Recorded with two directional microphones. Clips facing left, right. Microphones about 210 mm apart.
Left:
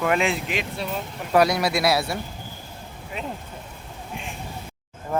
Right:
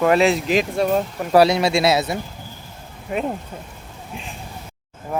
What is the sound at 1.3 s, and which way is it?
Speech, 25° right (ahead or behind).